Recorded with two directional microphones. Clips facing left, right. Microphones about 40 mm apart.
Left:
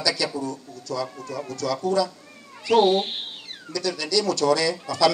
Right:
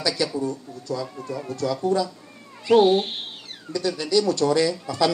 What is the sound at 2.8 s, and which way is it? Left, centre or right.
Speech, centre.